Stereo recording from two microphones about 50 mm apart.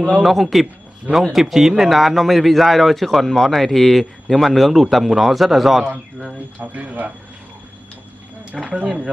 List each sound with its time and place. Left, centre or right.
0.2 s speech: centre
6.6 s speech: right
8.8 s speech: right